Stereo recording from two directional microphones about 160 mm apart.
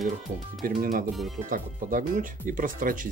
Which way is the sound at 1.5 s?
55° right (ahead or behind).